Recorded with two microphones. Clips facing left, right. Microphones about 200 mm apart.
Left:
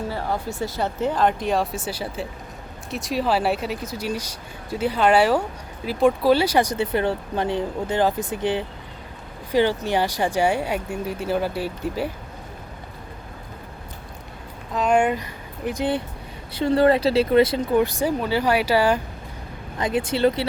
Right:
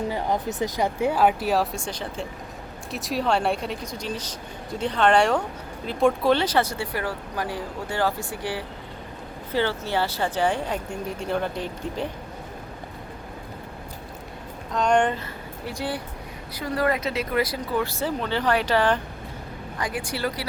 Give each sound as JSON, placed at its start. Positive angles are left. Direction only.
{"t": 0.1, "sound": "speech", "side_deg": -20}
{"t": 14.7, "sound": "speech", "side_deg": 5}
{"t": 15.6, "sound": "speech", "side_deg": 20}
{"t": 19.8, "sound": "speech", "side_deg": 25}